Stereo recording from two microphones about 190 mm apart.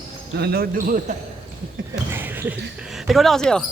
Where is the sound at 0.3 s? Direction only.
55° right (ahead or behind).